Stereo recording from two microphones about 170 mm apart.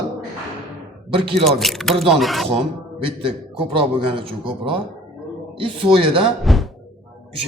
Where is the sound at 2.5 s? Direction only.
35° right (ahead or behind).